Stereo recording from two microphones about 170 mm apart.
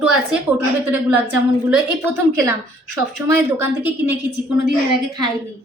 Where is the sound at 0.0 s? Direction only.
5° right (ahead or behind).